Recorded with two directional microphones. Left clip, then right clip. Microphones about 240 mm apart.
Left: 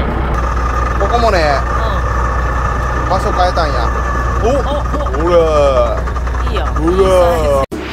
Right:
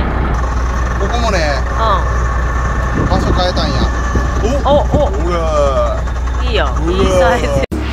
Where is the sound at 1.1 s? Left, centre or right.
Left.